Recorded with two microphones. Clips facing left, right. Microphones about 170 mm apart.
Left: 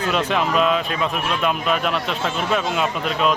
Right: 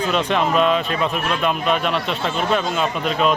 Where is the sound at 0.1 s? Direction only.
5° left (ahead or behind).